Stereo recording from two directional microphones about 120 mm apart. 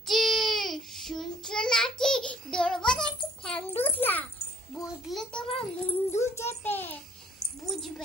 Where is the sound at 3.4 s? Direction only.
10° left (ahead or behind).